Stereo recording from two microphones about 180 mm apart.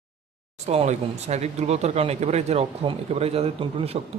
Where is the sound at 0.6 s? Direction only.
35° right (ahead or behind).